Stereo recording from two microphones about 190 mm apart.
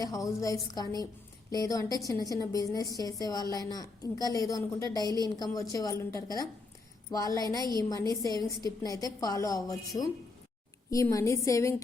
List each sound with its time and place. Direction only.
0.0 s a woman's voice: 15° left (ahead or behind)
5.0 s a woman's voice: 20° right (ahead or behind)
5.5 s a woman's voice: 15° left (ahead or behind)